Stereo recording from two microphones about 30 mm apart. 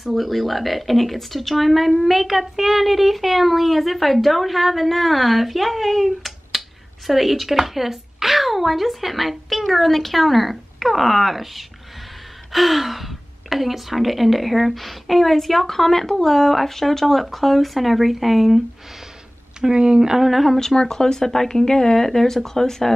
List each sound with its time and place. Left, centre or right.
0.0 s speech: centre
19.7 s speech: right
20.0 s speech: centre
20.2 s speech: centre
20.5 s speech: centre